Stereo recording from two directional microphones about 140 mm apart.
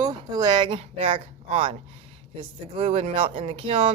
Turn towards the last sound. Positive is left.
turn(degrees=-40)  # may be behind; listen again after turning